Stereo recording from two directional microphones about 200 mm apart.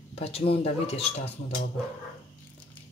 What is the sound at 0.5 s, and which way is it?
Speech, 30° left (ahead or behind).